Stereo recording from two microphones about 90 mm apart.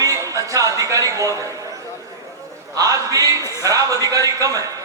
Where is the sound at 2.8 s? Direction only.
40° right (ahead or behind).